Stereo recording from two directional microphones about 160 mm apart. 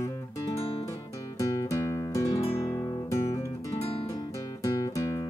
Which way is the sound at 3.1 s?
20° left (ahead or behind).